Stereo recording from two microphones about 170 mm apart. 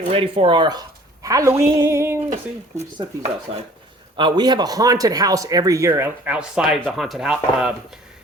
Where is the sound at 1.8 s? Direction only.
15° right (ahead or behind).